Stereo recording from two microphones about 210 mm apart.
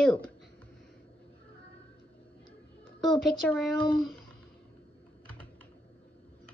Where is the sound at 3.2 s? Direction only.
Centre (ahead or behind).